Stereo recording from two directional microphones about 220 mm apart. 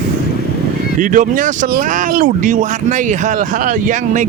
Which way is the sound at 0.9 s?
35° right (ahead or behind).